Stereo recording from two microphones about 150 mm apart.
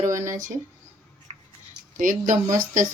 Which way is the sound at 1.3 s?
45° right (ahead or behind).